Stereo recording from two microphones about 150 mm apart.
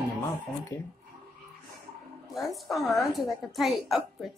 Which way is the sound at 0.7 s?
20° left (ahead or behind).